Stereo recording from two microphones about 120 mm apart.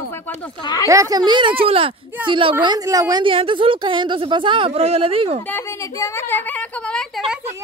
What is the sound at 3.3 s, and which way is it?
Speech, 45° right (ahead or behind).